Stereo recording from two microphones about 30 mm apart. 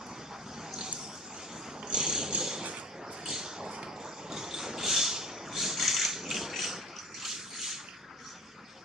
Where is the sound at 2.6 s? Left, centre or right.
Right.